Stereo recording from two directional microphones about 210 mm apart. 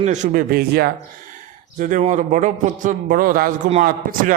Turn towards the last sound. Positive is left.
turn(degrees=-40)  # may be behind; listen again after turning